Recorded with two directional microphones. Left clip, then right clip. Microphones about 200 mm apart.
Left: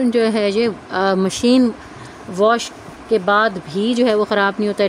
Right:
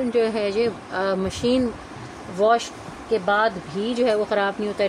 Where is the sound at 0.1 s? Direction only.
60° left (ahead or behind).